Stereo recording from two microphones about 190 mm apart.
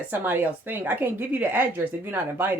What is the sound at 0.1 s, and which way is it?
A woman's voice, 10° right (ahead or behind).